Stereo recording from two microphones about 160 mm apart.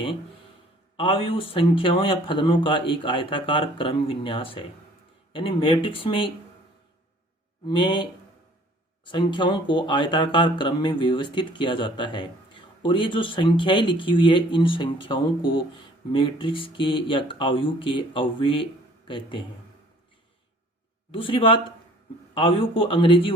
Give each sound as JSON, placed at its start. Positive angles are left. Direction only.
{"t": 0.9, "sound": "speech", "side_deg": 35}
{"t": 7.7, "sound": "speech", "side_deg": 30}
{"t": 9.0, "sound": "speech", "side_deg": 30}
{"t": 21.1, "sound": "speech", "side_deg": 35}